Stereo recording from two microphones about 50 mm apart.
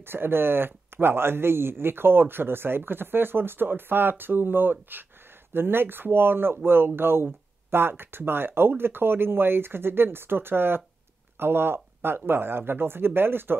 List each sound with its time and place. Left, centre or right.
0.0 s speech: right